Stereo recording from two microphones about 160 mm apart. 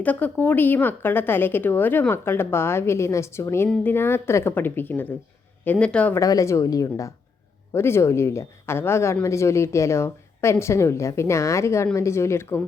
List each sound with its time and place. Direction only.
0.0 s a woman's voice: 10° left (ahead or behind)
6.1 s a woman's voice: 20° left (ahead or behind)